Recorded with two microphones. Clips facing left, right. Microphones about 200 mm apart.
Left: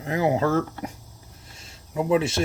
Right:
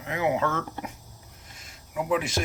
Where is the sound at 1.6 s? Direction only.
25° left (ahead or behind).